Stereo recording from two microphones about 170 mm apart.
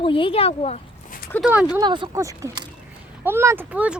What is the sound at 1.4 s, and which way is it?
Speech, 5° right (ahead or behind).